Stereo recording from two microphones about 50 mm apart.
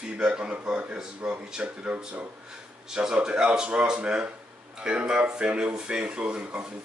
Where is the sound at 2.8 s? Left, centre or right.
Centre.